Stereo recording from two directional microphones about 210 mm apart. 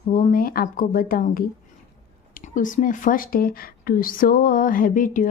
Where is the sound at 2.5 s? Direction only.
40° left (ahead or behind).